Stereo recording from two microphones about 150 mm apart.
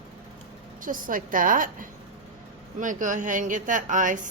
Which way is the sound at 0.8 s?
65° right (ahead or behind).